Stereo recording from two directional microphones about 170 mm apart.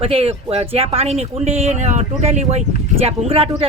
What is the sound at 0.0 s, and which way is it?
Speech, 35° right (ahead or behind).